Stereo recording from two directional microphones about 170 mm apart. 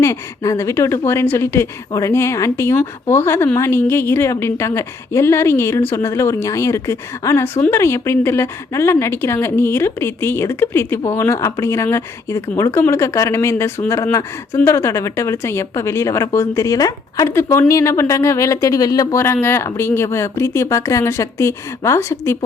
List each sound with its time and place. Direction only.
0.0 s speech: 15° left (ahead or behind)